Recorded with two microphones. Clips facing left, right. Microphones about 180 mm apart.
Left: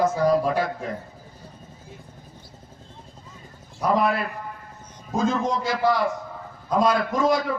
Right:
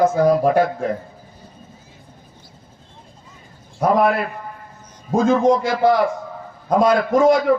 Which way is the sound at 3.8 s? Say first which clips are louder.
Right 5 dB; 55° right (ahead or behind).